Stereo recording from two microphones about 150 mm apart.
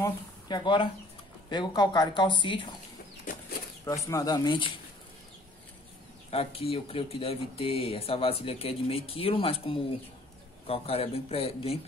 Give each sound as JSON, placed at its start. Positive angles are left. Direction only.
{"t": 0.0, "sound": "speech", "side_deg": 30}
{"t": 3.8, "sound": "speech", "side_deg": 20}
{"t": 6.3, "sound": "speech", "side_deg": 40}